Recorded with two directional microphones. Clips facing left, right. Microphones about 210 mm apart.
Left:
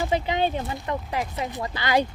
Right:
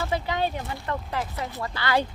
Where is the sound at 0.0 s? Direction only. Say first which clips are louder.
Left 3 dB; 20° left (ahead or behind).